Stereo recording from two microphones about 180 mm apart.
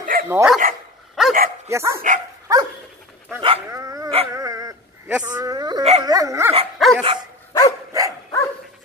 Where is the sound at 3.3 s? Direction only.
20° right (ahead or behind).